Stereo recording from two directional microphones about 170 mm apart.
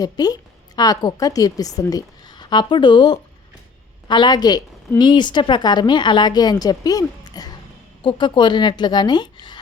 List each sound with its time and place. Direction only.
0.0 s a woman's voice: 20° left (ahead or behind)